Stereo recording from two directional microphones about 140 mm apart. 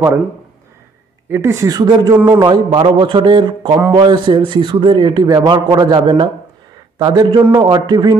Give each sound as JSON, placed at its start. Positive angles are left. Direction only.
{"t": 1.3, "sound": "a man's voice", "side_deg": -20}
{"t": 3.7, "sound": "speech", "side_deg": -20}
{"t": 4.0, "sound": "a man's voice", "side_deg": -35}